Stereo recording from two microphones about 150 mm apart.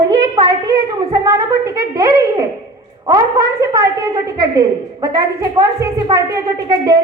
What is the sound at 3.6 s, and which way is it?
A woman's voice, 20° right (ahead or behind).